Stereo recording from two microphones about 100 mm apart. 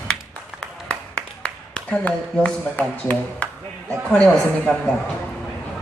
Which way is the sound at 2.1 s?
15° left (ahead or behind).